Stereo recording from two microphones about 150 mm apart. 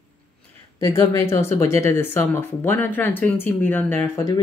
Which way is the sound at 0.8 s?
20° left (ahead or behind).